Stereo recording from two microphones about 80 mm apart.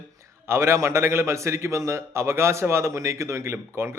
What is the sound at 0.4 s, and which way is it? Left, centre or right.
A man's voice, right.